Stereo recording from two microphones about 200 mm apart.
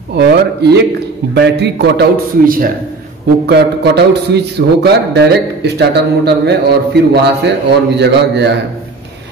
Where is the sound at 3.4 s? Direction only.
55° right (ahead or behind).